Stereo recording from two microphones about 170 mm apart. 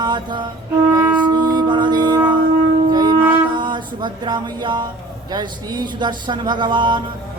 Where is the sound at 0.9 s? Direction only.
10° right (ahead or behind).